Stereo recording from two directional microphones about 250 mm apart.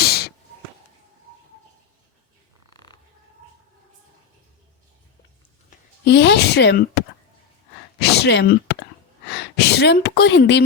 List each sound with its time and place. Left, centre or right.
0.0 s a sound: left
2.7 s frog: centre
6.1 s speech: left